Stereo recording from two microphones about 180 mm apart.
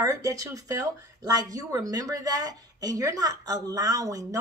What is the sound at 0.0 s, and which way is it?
A woman's voice, 20° right (ahead or behind).